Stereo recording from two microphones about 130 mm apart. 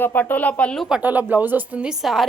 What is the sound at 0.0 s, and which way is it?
Speech, 15° left (ahead or behind).